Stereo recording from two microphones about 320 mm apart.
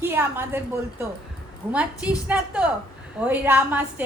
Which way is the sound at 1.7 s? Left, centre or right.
Centre.